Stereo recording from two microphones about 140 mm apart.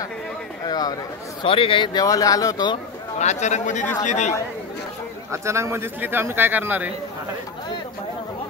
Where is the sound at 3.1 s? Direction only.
55° left (ahead or behind).